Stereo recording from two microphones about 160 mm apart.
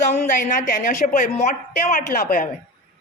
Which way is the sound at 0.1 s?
50° left (ahead or behind).